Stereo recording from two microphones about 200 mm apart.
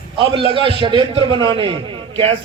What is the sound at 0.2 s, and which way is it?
A man's voice, 25° right (ahead or behind).